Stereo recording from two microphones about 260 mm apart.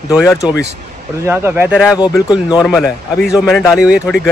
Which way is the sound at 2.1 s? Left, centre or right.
Centre.